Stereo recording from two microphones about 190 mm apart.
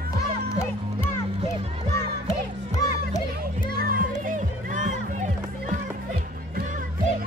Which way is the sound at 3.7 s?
50° right (ahead or behind).